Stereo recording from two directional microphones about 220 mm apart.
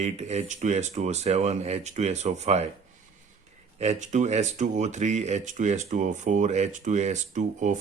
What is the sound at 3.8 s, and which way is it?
Speech, 30° right (ahead or behind).